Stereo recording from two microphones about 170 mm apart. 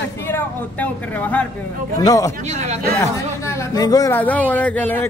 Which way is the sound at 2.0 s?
20° left (ahead or behind).